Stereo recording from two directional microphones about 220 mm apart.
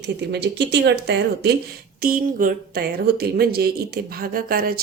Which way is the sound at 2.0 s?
40° right (ahead or behind).